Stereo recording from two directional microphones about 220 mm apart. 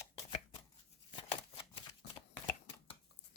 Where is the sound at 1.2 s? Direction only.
25° left (ahead or behind).